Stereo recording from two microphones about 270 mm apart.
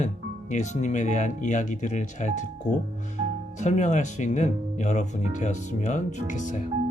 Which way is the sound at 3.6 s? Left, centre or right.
Left.